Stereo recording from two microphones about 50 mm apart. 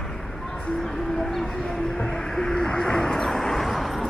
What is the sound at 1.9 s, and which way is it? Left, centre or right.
Vehicle, centre.